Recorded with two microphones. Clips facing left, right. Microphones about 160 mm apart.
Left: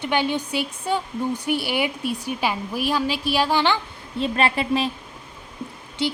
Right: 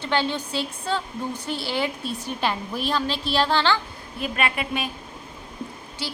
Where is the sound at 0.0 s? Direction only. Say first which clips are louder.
Left 2 dB; 15° left (ahead or behind).